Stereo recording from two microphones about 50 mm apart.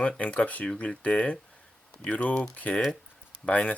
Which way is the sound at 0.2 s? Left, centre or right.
Left.